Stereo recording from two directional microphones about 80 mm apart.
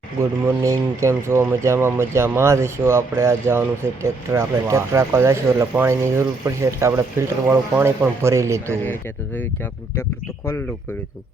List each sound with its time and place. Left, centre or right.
0.2 s speech: right
8.9 s speech: left